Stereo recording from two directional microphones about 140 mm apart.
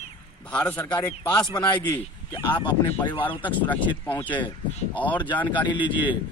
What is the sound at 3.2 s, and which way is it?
Speech, 10° left (ahead or behind).